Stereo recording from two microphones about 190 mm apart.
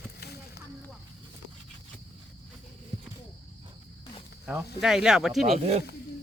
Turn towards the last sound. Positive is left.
turn(degrees=0)  # may be behind; listen again after turning